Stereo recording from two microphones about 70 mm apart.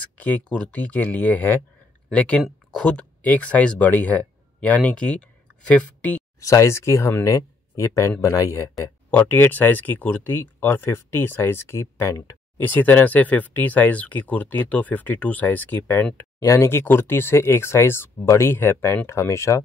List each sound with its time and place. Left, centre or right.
0.2 s speech: centre
6.4 s speech: left
9.2 s speech: left
12.5 s speech: left
16.3 s speech: left